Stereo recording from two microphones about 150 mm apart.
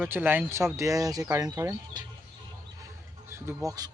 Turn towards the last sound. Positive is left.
turn(degrees=-25)  # may be behind; listen again after turning